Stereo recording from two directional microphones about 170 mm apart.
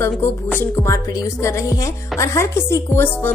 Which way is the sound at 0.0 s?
15° left (ahead or behind).